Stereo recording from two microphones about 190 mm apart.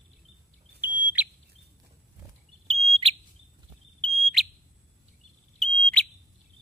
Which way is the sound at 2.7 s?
30° right (ahead or behind).